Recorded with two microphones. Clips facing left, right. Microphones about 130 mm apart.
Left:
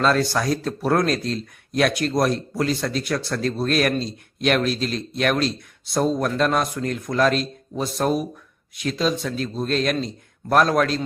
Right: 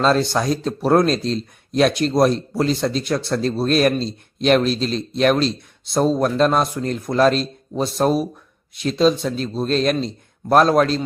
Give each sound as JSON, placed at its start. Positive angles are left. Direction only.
{"t": 0.0, "sound": "speech", "side_deg": -25}